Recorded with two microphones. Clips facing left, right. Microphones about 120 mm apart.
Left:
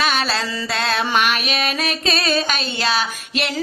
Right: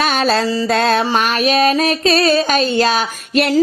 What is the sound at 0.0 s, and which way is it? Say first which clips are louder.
Music: right 6 dB; 45° right (ahead or behind).